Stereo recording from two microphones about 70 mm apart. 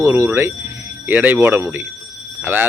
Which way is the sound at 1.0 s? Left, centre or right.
Right.